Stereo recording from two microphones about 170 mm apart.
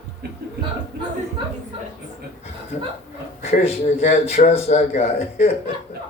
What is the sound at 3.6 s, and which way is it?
A man's voice, 35° left (ahead or behind).